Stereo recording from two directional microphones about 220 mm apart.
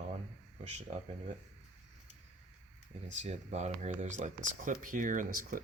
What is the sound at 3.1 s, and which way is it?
Speech, 30° right (ahead or behind).